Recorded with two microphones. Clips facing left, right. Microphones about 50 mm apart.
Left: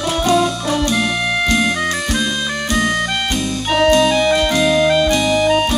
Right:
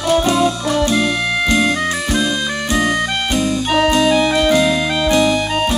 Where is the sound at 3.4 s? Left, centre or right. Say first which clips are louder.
Right 2 dB; centre.